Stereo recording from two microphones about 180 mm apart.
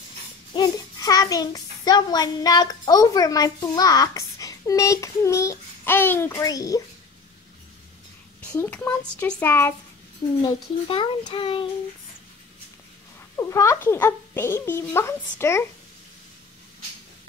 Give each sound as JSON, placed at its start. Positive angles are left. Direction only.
{"t": 0.6, "sound": "a child's voice", "side_deg": 20}
{"t": 8.4, "sound": "a child's voice", "side_deg": 10}
{"t": 10.4, "sound": "a child's voice", "side_deg": 25}
{"t": 13.4, "sound": "a child's voice", "side_deg": 15}